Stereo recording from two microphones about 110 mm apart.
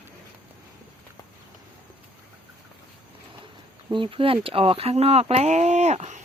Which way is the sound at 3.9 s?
50° right (ahead or behind).